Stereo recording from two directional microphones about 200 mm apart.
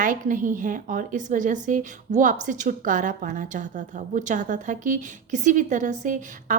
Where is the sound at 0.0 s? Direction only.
40° right (ahead or behind).